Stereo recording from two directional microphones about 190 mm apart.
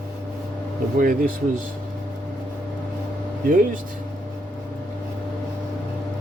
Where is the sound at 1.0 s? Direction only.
45° right (ahead or behind).